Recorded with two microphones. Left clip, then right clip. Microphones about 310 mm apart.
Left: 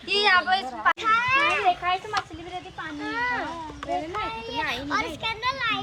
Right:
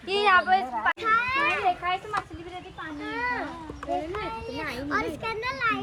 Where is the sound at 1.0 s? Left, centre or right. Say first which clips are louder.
Left 2 dB; left.